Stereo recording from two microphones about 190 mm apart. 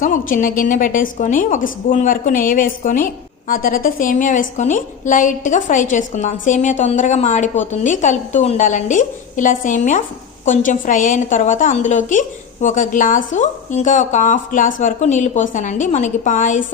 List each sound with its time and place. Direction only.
0.0 s a woman's voice: 45° left (ahead or behind)